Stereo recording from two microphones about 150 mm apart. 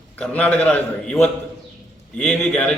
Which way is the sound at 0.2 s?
10° left (ahead or behind).